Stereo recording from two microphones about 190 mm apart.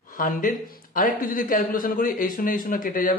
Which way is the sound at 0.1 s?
45° left (ahead or behind).